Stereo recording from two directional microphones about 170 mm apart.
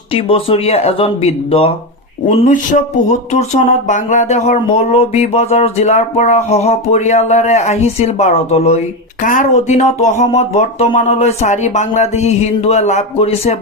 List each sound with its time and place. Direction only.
0.1 s speech: 35° left (ahead or behind)
2.2 s speech: 50° left (ahead or behind)